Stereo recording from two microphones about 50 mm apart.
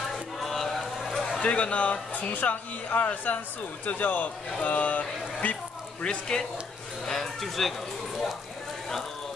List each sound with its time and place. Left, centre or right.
0.4 s a sound: centre
1.4 s speech: left
6.0 s speech: centre
7.1 s speech: centre